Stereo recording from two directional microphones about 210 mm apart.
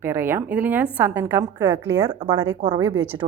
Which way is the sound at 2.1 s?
25° right (ahead or behind).